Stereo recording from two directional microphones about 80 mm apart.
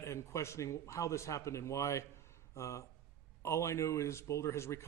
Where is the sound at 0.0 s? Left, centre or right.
Left.